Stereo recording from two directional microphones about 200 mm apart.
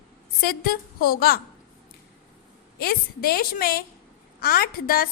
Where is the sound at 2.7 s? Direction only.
50° left (ahead or behind).